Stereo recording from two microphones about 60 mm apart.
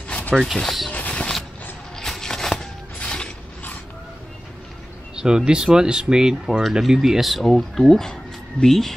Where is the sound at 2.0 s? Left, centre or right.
Centre.